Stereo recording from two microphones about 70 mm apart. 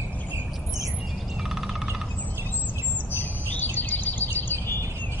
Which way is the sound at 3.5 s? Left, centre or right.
Left.